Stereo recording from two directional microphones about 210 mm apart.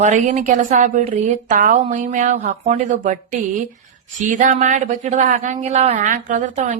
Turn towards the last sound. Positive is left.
turn(degrees=-35)  # may be behind; listen again after turning